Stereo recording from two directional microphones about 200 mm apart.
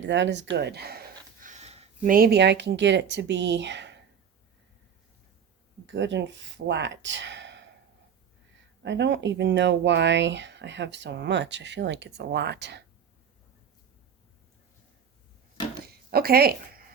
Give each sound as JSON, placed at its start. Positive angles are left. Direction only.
{"t": 0.0, "sound": "speech", "side_deg": -65}
{"t": 0.5, "sound": "a sound", "side_deg": -55}
{"t": 2.1, "sound": "speech", "side_deg": -50}
{"t": 5.8, "sound": "speech", "side_deg": -65}
{"t": 8.8, "sound": "speech", "side_deg": -60}
{"t": 16.0, "sound": "speech", "side_deg": -50}